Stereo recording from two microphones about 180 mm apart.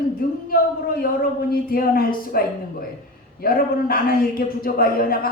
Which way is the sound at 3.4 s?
55° left (ahead or behind).